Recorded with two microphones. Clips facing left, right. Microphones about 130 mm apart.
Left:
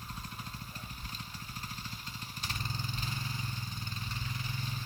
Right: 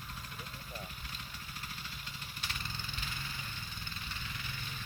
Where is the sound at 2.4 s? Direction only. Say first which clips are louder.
Left 4 dB; 35° left (ahead or behind).